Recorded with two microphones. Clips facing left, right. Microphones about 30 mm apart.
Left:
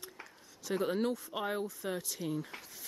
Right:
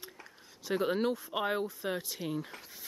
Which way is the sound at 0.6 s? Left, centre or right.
Centre.